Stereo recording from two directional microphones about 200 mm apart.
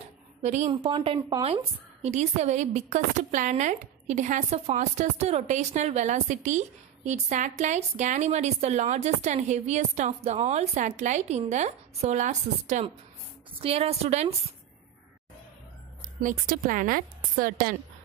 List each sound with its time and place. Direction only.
0.4 s a woman's voice: 35° right (ahead or behind)
16.2 s a woman's voice: 40° right (ahead or behind)